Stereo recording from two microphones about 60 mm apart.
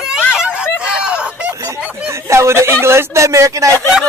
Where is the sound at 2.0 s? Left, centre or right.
Right.